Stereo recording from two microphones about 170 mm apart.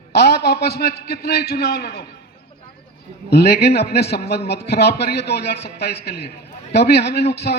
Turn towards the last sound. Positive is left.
turn(degrees=75)  # may be behind; listen again after turning